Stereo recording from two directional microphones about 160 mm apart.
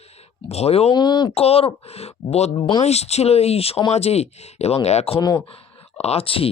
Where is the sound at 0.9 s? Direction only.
30° left (ahead or behind).